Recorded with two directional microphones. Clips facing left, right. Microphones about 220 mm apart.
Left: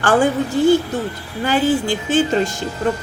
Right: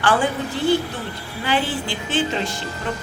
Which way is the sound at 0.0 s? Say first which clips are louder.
Left 5 dB; 45° left (ahead or behind).